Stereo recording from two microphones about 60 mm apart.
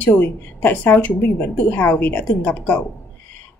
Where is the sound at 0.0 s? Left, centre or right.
Left.